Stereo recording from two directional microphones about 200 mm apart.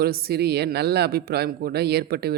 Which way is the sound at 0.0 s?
50° right (ahead or behind).